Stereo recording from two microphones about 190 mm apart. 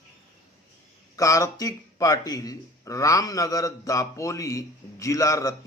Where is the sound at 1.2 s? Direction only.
15° left (ahead or behind).